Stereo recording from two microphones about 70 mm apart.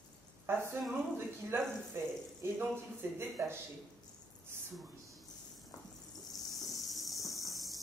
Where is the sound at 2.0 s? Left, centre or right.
Right.